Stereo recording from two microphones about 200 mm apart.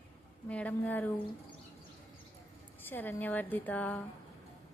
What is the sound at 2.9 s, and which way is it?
Speech, 10° left (ahead or behind).